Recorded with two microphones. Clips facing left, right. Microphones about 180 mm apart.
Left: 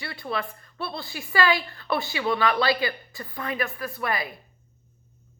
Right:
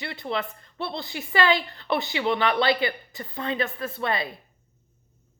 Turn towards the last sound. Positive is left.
turn(degrees=-25)  # may be behind; listen again after turning